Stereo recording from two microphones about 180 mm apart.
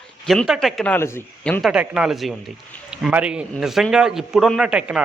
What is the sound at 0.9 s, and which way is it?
Speech, 15° left (ahead or behind).